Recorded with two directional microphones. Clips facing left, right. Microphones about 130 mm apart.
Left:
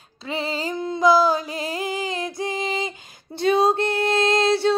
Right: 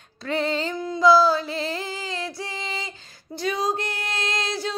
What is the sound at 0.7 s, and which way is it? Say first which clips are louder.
Music: even; 25° left (ahead or behind).